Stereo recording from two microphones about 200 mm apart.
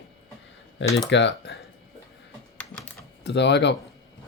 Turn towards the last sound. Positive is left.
turn(degrees=60)  # may be behind; listen again after turning